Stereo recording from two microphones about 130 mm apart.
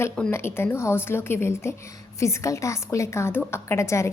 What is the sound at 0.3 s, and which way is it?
A woman's voice, 20° left (ahead or behind).